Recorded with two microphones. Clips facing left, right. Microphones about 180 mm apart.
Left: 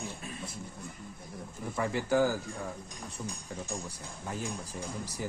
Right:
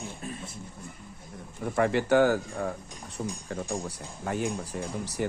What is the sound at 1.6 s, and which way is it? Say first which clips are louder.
Speech: right 7 dB; 70° right (ahead or behind).